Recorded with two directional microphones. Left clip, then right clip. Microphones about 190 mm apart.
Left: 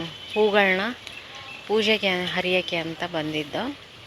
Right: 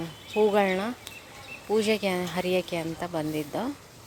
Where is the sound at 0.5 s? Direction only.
15° right (ahead or behind).